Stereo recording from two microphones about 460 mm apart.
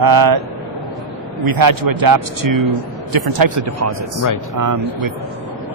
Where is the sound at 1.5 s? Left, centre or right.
Right.